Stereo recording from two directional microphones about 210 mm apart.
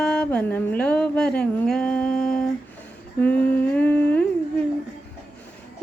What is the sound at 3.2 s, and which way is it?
Humming, 5° left (ahead or behind).